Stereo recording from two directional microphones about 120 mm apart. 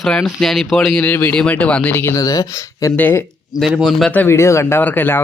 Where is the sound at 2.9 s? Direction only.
15° left (ahead or behind).